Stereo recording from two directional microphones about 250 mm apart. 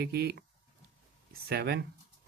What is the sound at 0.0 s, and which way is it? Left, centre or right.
Speech, right.